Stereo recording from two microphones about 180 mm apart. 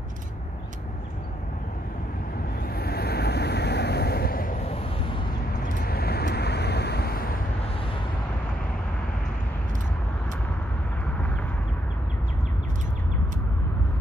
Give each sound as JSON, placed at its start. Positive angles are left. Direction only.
{"t": 2.7, "sound": "vehicle", "side_deg": 60}
{"t": 5.8, "sound": "vehicle", "side_deg": 60}